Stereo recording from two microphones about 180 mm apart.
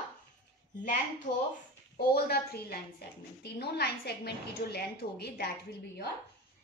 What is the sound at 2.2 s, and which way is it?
A woman's voice, 60° left (ahead or behind).